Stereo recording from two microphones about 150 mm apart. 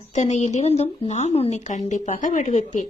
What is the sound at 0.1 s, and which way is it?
Speech, 50° left (ahead or behind).